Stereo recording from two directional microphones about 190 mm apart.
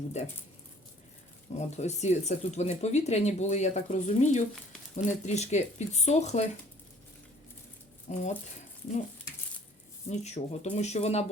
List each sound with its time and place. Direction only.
0.1 s speech: 35° left (ahead or behind)
1.5 s speech: 35° left (ahead or behind)
8.1 s speech: 35° left (ahead or behind)
10.1 s speech: 35° left (ahead or behind)